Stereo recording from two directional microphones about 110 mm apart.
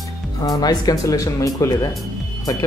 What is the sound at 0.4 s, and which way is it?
Speech, 35° left (ahead or behind).